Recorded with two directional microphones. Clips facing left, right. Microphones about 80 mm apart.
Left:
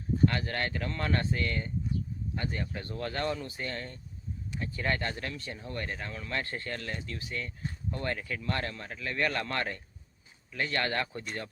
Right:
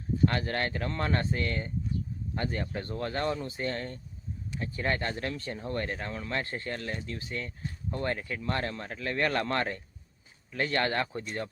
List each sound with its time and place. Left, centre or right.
0.3 s speech: right